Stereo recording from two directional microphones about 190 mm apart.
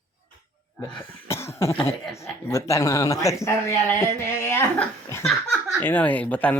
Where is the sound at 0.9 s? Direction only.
15° left (ahead or behind).